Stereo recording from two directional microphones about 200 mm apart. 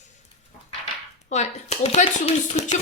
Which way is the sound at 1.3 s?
35° left (ahead or behind).